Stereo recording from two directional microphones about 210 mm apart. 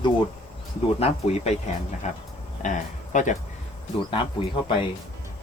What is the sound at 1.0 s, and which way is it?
Speech, 30° left (ahead or behind).